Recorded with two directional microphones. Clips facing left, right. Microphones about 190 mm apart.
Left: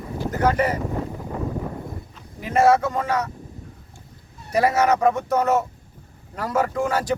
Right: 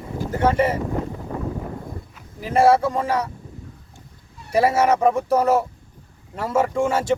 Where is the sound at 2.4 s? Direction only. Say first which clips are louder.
Right 1 dB; 30° right (ahead or behind).